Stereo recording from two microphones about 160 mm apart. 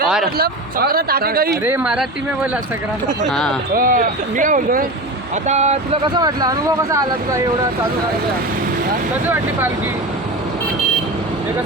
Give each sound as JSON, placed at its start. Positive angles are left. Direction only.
{"t": 0.3, "sound": "speech", "side_deg": -70}
{"t": 1.6, "sound": "speech", "side_deg": -10}
{"t": 3.8, "sound": "speech", "side_deg": -60}
{"t": 5.5, "sound": "speech", "side_deg": -45}